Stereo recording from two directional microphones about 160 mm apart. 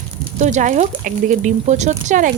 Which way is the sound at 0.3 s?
50° right (ahead or behind).